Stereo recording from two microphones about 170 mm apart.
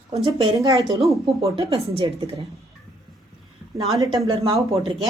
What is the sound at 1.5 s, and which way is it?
Speech, 35° right (ahead or behind).